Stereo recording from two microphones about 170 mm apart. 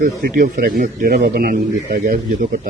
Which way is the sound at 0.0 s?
55° right (ahead or behind).